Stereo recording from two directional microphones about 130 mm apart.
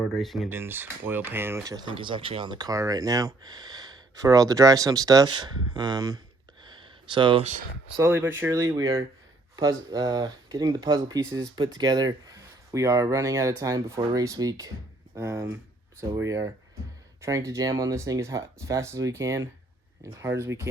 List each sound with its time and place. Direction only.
0.0 s speech: 5° left (ahead or behind)
0.4 s speech: 15° right (ahead or behind)
1.7 s speech: 35° right (ahead or behind)
7.9 s speech: 20° right (ahead or behind)